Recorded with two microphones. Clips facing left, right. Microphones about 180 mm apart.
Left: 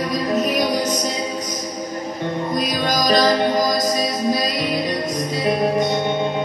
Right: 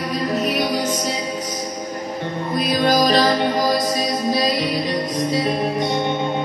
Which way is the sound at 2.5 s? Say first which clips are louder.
Right 6 dB; 40° left (ahead or behind).